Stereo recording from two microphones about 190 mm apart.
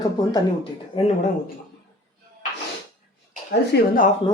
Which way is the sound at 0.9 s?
30° left (ahead or behind).